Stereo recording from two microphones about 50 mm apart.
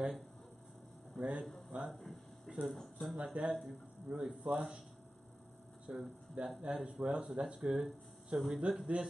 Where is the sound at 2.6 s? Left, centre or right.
Centre.